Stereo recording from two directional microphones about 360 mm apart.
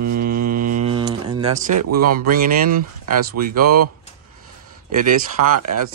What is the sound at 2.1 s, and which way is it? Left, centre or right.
Speech, right.